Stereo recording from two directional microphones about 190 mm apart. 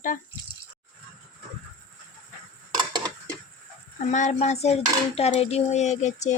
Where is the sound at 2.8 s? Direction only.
20° right (ahead or behind).